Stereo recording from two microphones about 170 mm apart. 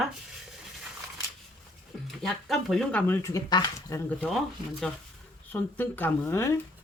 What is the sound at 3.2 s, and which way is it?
Speech, 20° left (ahead or behind).